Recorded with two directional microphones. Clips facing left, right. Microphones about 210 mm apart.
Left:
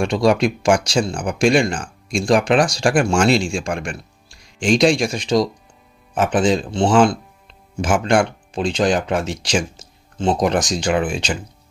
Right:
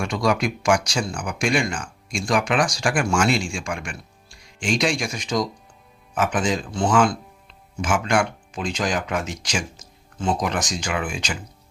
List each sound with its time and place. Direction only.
0.0 s speech: 30° left (ahead or behind)